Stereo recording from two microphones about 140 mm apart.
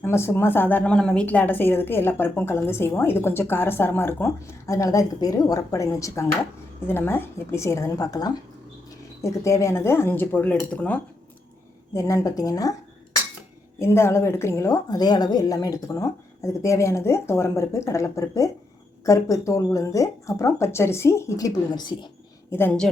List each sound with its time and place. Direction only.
0.0 s a woman's voice: 20° left (ahead or behind)
11.9 s a woman's voice: 25° left (ahead or behind)
13.7 s a woman's voice: 20° left (ahead or behind)
22.4 s a woman's voice: 15° left (ahead or behind)